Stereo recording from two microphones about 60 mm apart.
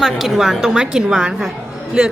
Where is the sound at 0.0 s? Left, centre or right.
Centre.